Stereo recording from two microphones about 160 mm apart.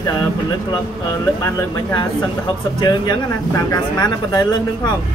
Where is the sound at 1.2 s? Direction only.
20° left (ahead or behind).